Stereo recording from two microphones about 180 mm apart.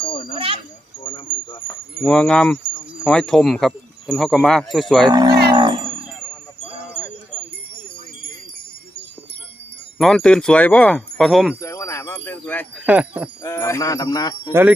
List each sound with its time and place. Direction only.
0.3 s wind chime: 30° right (ahead or behind)
1.0 s wind chime: 30° left (ahead or behind)
2.0 s speech: 5° left (ahead or behind)
5.1 s chime: 20° right (ahead or behind)
5.5 s wind chime: 25° right (ahead or behind)
10.0 s speech: centre (ahead or behind)
11.6 s wind chime: 15° left (ahead or behind)
12.7 s speech: 10° right (ahead or behind)
13.4 s a sound: 15° left (ahead or behind)
14.5 s speech: 10° right (ahead or behind)